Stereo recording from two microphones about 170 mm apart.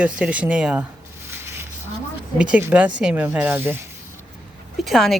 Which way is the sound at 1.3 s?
15° right (ahead or behind).